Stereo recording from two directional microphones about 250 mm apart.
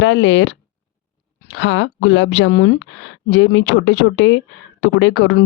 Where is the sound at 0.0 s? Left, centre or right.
Left.